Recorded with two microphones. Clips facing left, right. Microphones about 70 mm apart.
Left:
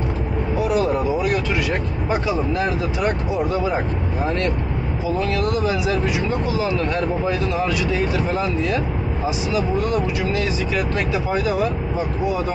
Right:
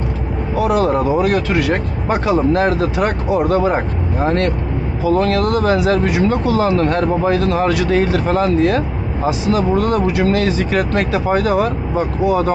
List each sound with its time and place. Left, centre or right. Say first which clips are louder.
0.6 s speech: right 5 dB; right